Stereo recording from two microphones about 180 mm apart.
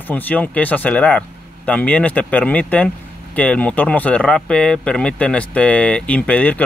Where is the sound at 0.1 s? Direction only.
10° left (ahead or behind).